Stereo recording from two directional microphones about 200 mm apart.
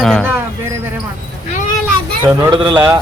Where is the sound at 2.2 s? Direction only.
20° right (ahead or behind).